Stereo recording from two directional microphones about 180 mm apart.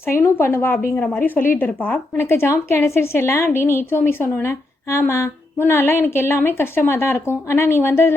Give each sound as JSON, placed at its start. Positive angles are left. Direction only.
{"t": 0.0, "sound": "a woman's voice", "side_deg": 15}
{"t": 1.2, "sound": "a woman's voice", "side_deg": 50}
{"t": 1.5, "sound": "a woman's voice", "side_deg": 10}